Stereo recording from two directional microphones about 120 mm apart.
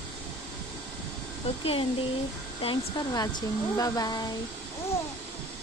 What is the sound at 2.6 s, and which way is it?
A woman's voice, 40° left (ahead or behind).